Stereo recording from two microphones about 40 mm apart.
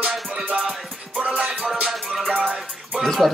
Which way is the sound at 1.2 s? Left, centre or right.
Right.